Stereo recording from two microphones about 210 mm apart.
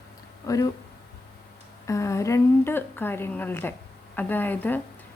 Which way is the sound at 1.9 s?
15° left (ahead or behind).